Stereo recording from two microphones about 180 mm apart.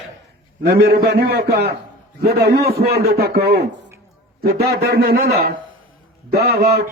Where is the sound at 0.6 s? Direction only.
60° right (ahead or behind).